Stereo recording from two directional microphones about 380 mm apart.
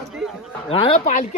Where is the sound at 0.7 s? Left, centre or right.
Centre.